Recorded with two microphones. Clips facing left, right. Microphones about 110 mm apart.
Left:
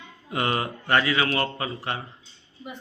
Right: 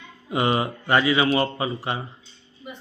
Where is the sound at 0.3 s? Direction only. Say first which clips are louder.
Right 4 dB; 15° right (ahead or behind).